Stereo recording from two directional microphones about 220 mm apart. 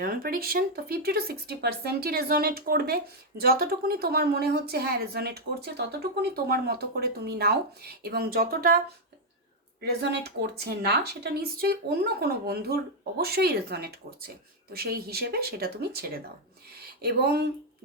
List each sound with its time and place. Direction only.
0.0 s speech: 40° right (ahead or behind)
9.8 s speech: 50° right (ahead or behind)
16.8 s a sound: 45° right (ahead or behind)